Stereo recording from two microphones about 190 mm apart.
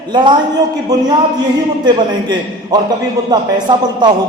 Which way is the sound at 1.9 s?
25° right (ahead or behind).